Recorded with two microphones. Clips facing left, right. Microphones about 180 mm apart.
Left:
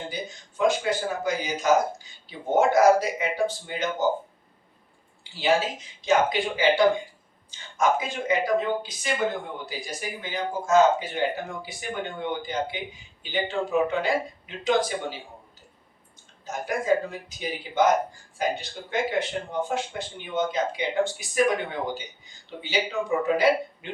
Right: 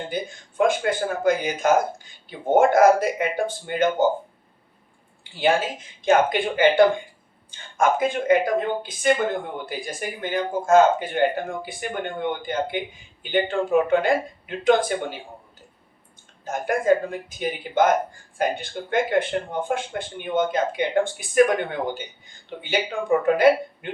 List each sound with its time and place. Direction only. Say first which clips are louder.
0.1 s speech: right 5 dB; 55° right (ahead or behind)
5.3 s speech: right 2 dB; 55° right (ahead or behind)
16.4 s speech: right 5 dB; 55° right (ahead or behind)